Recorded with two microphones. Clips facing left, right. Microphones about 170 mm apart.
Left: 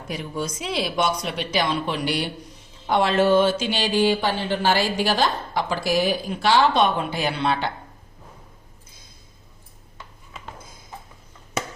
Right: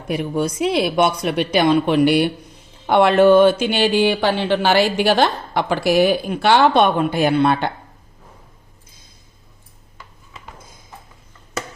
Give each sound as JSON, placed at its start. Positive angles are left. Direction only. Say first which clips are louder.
{"t": 0.1, "sound": "speech", "louder": "right 8 dB", "side_deg": -60}